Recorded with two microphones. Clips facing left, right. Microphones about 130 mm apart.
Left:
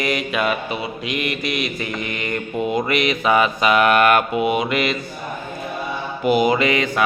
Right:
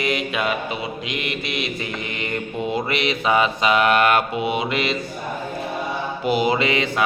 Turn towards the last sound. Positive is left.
turn(degrees=-25)  # may be behind; listen again after turning